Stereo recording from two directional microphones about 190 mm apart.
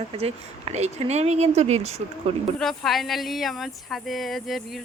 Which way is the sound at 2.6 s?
Centre (ahead or behind).